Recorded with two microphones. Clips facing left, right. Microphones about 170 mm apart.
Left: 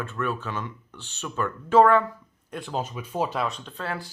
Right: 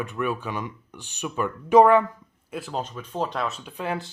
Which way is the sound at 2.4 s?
5° right (ahead or behind).